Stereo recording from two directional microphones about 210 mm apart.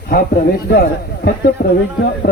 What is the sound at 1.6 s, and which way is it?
Speech, 50° left (ahead or behind).